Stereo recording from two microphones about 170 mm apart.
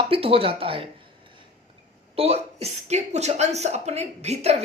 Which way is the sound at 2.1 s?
35° right (ahead or behind).